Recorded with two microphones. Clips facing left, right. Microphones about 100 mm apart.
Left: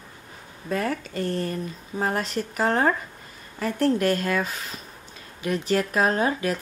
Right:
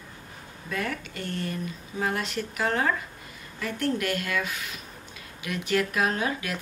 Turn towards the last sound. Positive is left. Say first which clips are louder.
# left 5 dB
turn(degrees=35)  # may be behind; listen again after turning